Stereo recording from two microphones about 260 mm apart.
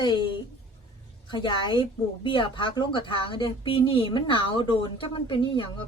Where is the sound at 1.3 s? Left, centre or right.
Centre.